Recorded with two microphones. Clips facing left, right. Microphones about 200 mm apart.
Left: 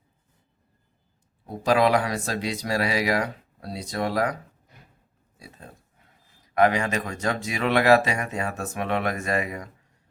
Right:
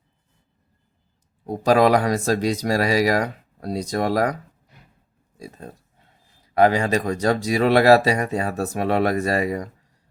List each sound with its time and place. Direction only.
1.5 s speech: 40° right (ahead or behind)
5.4 s speech: 40° right (ahead or behind)
6.0 s speech: 30° right (ahead or behind)